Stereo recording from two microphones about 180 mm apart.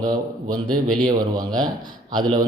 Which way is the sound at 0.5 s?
25° right (ahead or behind).